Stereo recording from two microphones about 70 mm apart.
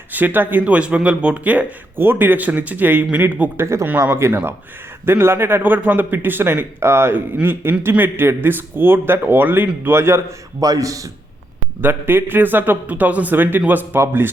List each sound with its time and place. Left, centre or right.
0.1 s speech: right
3.6 s a man's voice: right
10.6 s a man's voice: right
11.8 s a man's voice: right